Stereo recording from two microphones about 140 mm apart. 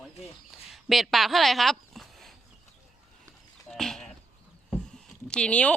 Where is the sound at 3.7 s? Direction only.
Centre (ahead or behind).